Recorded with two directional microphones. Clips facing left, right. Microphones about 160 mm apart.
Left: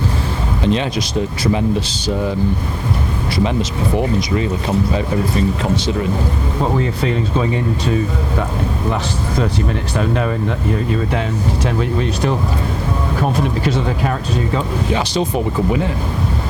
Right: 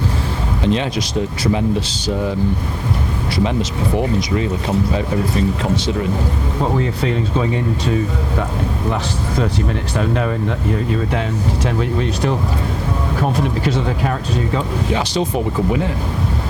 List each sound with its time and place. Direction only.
0.6 s speech: 20° left (ahead or behind)
3.3 s speech: 20° left (ahead or behind)
14.5 s speech: 15° left (ahead or behind)